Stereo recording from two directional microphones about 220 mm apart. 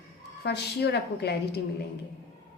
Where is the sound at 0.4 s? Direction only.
50° left (ahead or behind).